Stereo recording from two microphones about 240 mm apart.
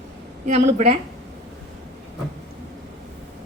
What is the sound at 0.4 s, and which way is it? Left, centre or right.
Speech, right.